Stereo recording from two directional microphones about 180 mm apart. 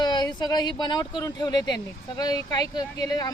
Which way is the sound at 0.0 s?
25° left (ahead or behind).